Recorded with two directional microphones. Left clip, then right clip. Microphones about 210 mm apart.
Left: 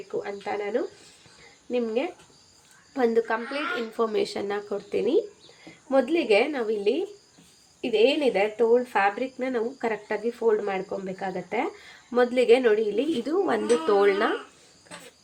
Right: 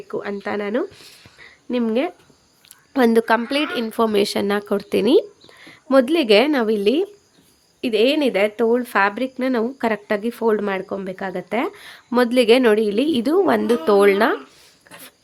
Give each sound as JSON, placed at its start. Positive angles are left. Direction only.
{"t": 0.1, "sound": "a woman's voice", "side_deg": -50}
{"t": 7.8, "sound": "speech", "side_deg": -45}